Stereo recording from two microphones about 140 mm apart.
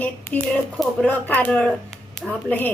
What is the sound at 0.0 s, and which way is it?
A woman's voice, 15° left (ahead or behind).